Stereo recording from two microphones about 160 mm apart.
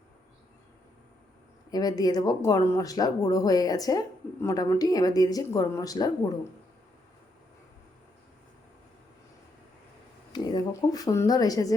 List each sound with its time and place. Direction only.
1.7 s speech: 25° left (ahead or behind)
10.3 s speech: 25° left (ahead or behind)